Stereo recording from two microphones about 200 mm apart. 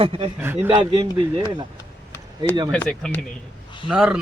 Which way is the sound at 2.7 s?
5° left (ahead or behind).